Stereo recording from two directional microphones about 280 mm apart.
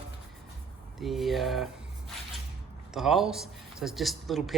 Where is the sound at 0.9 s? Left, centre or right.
Centre.